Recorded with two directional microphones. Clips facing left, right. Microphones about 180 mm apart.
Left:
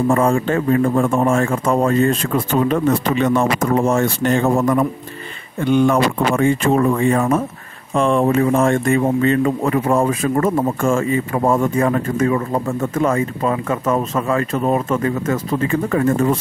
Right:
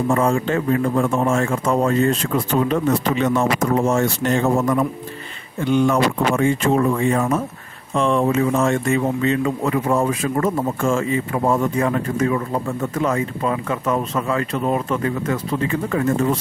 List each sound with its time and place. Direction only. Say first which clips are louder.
0.1 s a man's voice: left 2 dB; 50° left (ahead or behind)
5.6 s a man's voice: left 2 dB; 55° left (ahead or behind)